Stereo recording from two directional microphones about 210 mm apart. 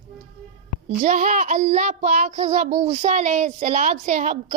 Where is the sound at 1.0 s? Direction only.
35° right (ahead or behind).